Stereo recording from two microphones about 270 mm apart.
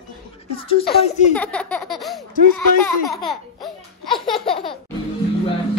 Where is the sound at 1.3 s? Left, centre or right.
Centre.